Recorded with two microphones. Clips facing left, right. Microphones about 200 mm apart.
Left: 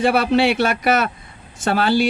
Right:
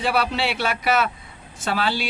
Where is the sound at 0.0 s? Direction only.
50° left (ahead or behind).